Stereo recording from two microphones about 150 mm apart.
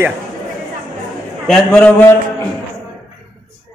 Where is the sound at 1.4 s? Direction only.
5° left (ahead or behind).